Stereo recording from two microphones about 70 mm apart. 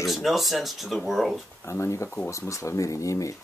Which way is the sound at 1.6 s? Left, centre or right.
Left.